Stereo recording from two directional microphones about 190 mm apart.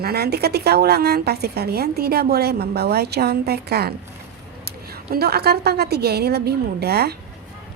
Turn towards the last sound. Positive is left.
turn(degrees=-55)  # may be behind; listen again after turning